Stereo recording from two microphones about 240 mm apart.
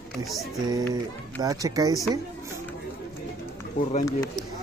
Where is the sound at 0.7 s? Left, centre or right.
Centre.